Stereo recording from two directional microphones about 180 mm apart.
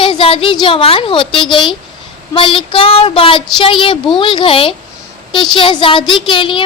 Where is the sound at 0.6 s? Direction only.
30° left (ahead or behind).